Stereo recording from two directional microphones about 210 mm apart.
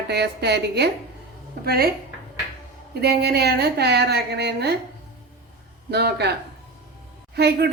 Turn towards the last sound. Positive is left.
turn(degrees=-50)  # may be behind; listen again after turning